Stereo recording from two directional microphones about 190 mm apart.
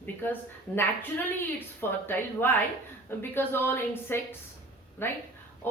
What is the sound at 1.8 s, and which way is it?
A woman's voice, 10° left (ahead or behind).